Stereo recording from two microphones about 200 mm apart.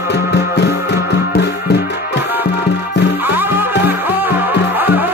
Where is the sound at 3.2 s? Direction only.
10° right (ahead or behind).